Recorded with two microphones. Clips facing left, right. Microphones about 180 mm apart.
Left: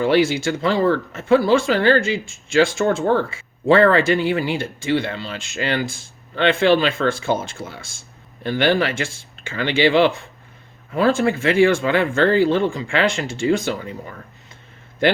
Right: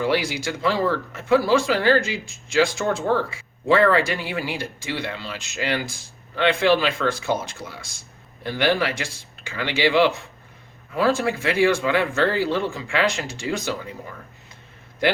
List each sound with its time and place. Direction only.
0.0 s speech: 25° left (ahead or behind)